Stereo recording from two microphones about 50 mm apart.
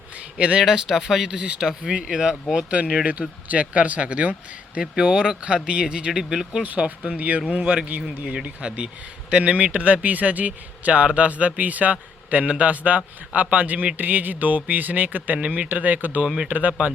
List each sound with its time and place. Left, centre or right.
0.3 s speech: right
0.6 s speech: centre; by 4.8 s right
4.8 s speech: centre
6.6 s speech: right
8.0 s speech: centre; by 16.7 s right